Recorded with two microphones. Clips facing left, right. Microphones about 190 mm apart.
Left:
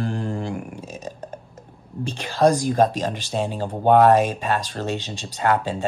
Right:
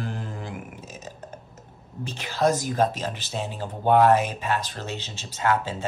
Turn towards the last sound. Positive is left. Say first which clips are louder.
# left 3 dB
turn(degrees=15)  # may be behind; listen again after turning